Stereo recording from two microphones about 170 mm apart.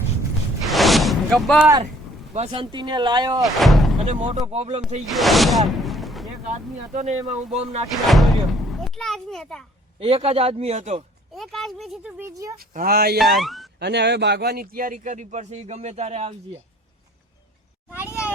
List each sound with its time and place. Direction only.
0.6 s a sound: centre (ahead or behind)
2.3 s speech: 35° right (ahead or behind)
3.4 s speech: centre (ahead or behind)
4.0 s speech: 45° right (ahead or behind)
5.0 s a sound: centre (ahead or behind)
6.9 s speech: 40° right (ahead or behind)
8.0 s a child's voice: centre (ahead or behind)
10.0 s speech: 35° right (ahead or behind)
11.3 s speech: centre (ahead or behind)
12.3 s speech: 20° right (ahead or behind)
12.5 s speech: 60° right (ahead or behind)
13.1 s speech: centre (ahead or behind)
13.7 s speech: 80° right; by 16.6 s 35° right (ahead or behind)